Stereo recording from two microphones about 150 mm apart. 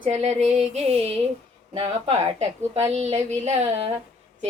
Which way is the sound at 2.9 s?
45° right (ahead or behind).